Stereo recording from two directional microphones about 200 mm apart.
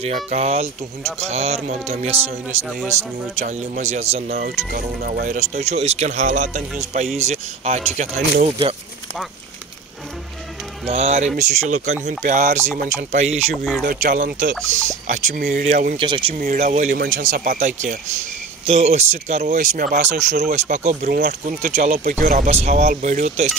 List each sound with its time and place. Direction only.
0.0 s speech: 35° right (ahead or behind)
3.3 s speech: 35° right (ahead or behind)
4.4 s speech: 45° right (ahead or behind)
10.9 s speech: 35° right (ahead or behind)
16.0 s speech: 25° right (ahead or behind)
16.3 s speech: 40° right (ahead or behind)